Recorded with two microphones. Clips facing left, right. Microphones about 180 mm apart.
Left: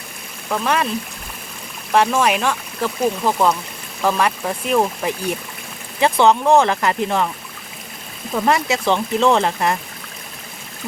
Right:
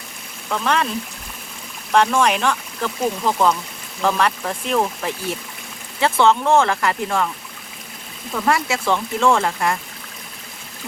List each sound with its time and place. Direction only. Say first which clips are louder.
0.5 s speech: left 1 dB; 10° left (ahead or behind)
1.9 s speech: even; 5° left (ahead or behind)
8.4 s speech: left 2 dB; 20° left (ahead or behind)